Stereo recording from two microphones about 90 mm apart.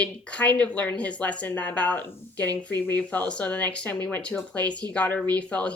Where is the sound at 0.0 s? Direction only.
15° left (ahead or behind).